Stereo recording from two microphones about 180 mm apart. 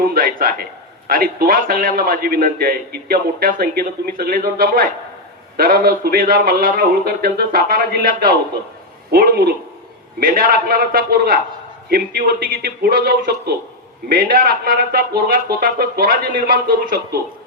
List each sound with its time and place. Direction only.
0.0 s a man's voice: 55° right (ahead or behind)